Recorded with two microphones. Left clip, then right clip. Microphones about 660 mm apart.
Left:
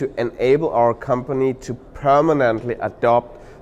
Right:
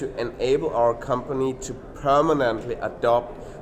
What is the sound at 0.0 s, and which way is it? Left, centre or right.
Speech, left.